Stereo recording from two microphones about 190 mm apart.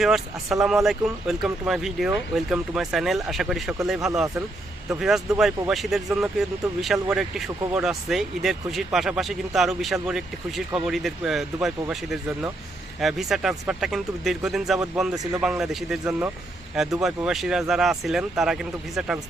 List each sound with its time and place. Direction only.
0.0 s speech: centre (ahead or behind)
15.1 s speech: 20° right (ahead or behind)
15.4 s speech: 5° right (ahead or behind)